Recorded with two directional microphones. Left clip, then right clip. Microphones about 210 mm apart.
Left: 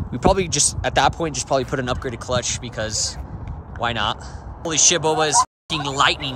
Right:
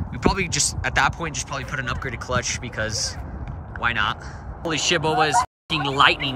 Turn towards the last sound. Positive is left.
turn(degrees=0)  # may be behind; listen again after turning